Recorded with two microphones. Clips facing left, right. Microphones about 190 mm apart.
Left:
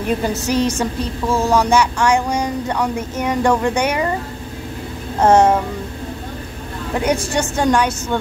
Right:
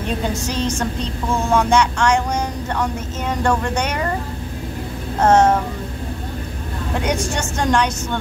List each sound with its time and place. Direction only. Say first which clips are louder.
0.2 s speech: left 4 dB; 5° left (ahead or behind)
5.2 s speech: left 2 dB; 10° left (ahead or behind)
7.3 s speech: left 3 dB; 5° left (ahead or behind)